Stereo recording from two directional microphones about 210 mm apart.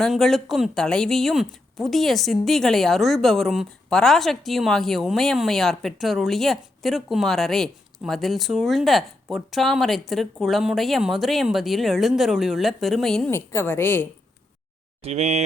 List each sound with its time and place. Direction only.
0.0 s speech: centre (ahead or behind)
15.0 s speech: 30° right (ahead or behind)